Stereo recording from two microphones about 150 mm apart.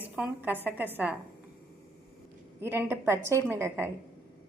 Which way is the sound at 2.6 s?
15° right (ahead or behind).